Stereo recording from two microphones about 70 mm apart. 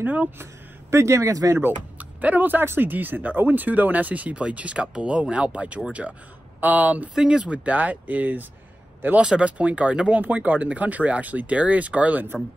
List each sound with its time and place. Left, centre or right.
0.0 s speech: right
0.4 s speech: right
1.6 s speech: right
6.0 s a man's voice: centre
6.6 s speech: right
9.2 s speech: centre